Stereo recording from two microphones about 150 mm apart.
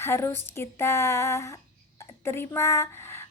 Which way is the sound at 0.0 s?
15° left (ahead or behind).